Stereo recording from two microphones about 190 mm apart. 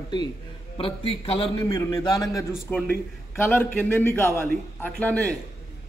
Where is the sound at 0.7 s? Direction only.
30° left (ahead or behind).